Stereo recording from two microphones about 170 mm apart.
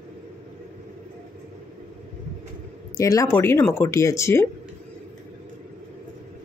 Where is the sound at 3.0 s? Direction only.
20° left (ahead or behind).